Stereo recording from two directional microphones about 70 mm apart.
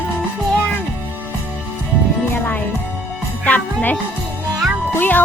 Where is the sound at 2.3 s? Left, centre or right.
Left.